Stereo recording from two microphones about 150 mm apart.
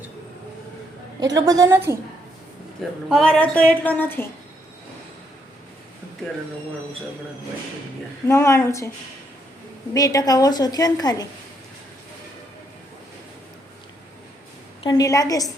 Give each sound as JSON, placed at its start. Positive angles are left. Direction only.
{"t": 1.2, "sound": "a woman's voice", "side_deg": -25}
{"t": 3.1, "sound": "a woman's voice", "side_deg": 5}
{"t": 8.3, "sound": "a woman's voice", "side_deg": 20}
{"t": 9.9, "sound": "a woman's voice", "side_deg": 25}
{"t": 14.8, "sound": "a woman's voice", "side_deg": 20}